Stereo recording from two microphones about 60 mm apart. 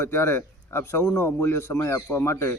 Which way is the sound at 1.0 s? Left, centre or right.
Left.